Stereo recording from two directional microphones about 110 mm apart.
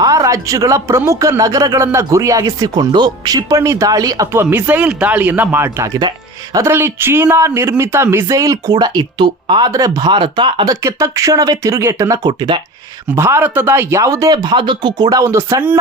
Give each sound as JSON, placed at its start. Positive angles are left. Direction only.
{"t": 0.0, "sound": "speech", "side_deg": -30}
{"t": 4.4, "sound": "speech", "side_deg": -15}
{"t": 5.9, "sound": "speech", "side_deg": -35}
{"t": 6.7, "sound": "speech", "side_deg": -20}
{"t": 10.1, "sound": "speech", "side_deg": -50}
{"t": 10.7, "sound": "speech", "side_deg": -30}